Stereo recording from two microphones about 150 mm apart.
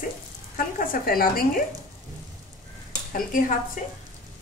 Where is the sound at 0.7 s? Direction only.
70° left (ahead or behind).